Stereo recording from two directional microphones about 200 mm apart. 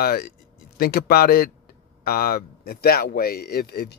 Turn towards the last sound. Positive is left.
turn(degrees=50)  # may be behind; listen again after turning